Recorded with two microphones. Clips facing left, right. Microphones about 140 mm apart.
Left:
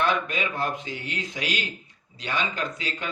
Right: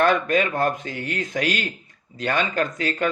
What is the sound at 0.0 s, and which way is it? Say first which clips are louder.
A man's voice: right 6 dB; 50° right (ahead or behind).